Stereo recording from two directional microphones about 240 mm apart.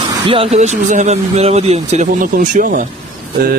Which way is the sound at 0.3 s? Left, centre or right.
Right.